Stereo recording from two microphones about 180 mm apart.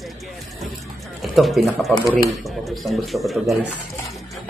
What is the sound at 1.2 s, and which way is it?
Speech, centre (ahead or behind).